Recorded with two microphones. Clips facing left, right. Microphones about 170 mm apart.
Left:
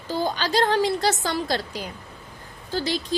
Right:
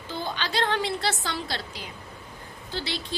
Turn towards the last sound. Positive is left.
turn(degrees=45)  # may be behind; listen again after turning